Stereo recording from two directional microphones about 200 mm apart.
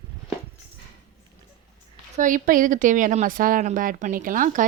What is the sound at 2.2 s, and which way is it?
Speech, 40° right (ahead or behind).